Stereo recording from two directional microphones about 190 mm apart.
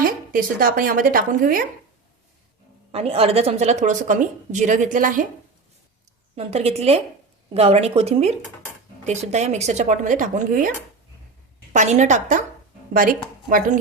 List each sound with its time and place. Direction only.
0.0 s a woman's voice: 45° right (ahead or behind)
2.9 s a woman's voice: 30° right (ahead or behind)
6.3 s a woman's voice: 30° right (ahead or behind)
11.7 s a woman's voice: 40° right (ahead or behind)